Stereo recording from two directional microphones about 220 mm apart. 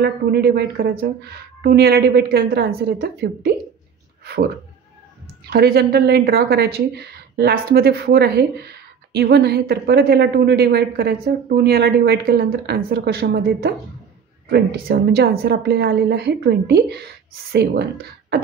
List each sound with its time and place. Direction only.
0.0 s a woman's voice: 45° right (ahead or behind)
4.2 s a sound: 45° right (ahead or behind)
5.5 s a woman's voice: 45° right (ahead or behind)